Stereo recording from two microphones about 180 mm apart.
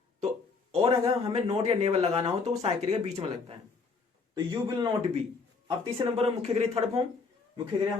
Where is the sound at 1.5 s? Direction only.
35° right (ahead or behind).